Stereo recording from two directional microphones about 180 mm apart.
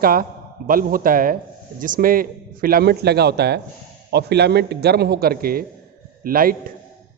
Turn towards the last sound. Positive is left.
turn(degrees=-55)  # may be behind; listen again after turning